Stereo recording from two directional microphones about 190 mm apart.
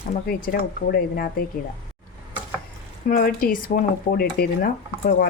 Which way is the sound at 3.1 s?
45° left (ahead or behind).